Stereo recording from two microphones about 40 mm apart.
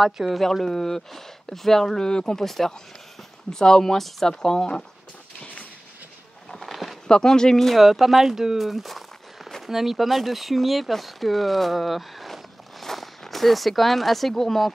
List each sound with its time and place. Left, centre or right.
0.0 s speech: centre
0.4 s speech: centre
2.4 s speech: centre
5.4 s a sound: left
6.5 s a sound: centre
7.1 s speech: centre
7.8 s speech: centre